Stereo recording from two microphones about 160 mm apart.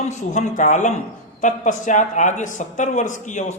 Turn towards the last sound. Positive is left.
turn(degrees=50)  # may be behind; listen again after turning